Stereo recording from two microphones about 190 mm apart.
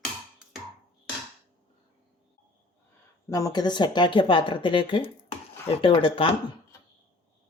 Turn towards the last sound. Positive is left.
turn(degrees=25)  # may be behind; listen again after turning